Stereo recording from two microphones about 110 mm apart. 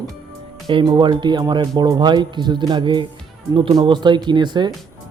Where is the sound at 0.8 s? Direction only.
40° right (ahead or behind).